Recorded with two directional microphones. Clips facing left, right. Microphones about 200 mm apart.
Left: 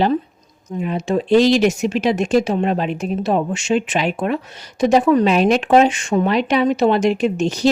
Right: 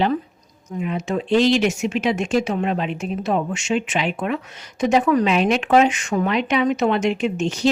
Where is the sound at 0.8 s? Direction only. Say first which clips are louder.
Left 4 dB; 35° left (ahead or behind).